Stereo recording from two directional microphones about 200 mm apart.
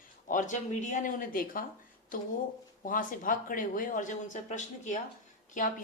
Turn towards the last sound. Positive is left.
turn(degrees=40)  # may be behind; listen again after turning